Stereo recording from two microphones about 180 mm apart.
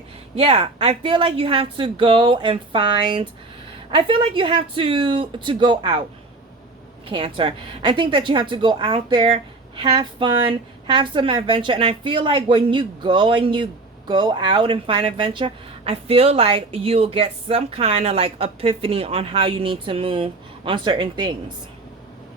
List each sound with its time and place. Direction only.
0.3 s a woman's voice: 30° right (ahead or behind)
7.1 s a woman's voice: 30° right (ahead or behind)